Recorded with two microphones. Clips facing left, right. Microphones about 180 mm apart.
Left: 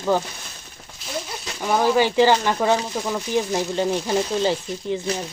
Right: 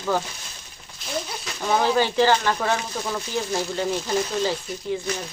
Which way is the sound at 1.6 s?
5° left (ahead or behind).